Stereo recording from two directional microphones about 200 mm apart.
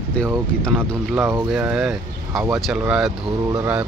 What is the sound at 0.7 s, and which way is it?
Speech, 10° right (ahead or behind).